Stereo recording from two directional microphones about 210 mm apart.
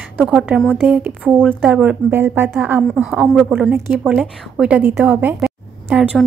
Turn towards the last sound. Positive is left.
turn(degrees=-5)  # may be behind; listen again after turning